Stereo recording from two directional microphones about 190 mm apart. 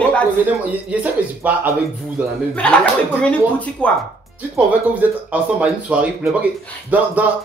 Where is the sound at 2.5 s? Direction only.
5° left (ahead or behind).